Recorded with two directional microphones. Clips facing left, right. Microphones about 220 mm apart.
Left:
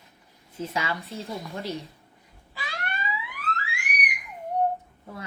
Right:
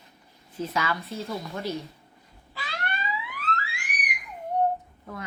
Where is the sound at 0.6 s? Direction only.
25° left (ahead or behind).